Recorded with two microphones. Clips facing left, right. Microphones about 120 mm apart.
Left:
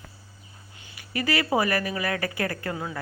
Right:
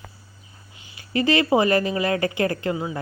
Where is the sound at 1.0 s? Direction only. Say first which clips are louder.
Right 6 dB; 25° right (ahead or behind).